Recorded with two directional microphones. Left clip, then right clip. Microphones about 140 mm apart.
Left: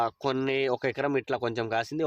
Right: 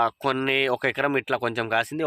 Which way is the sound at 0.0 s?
20° right (ahead or behind).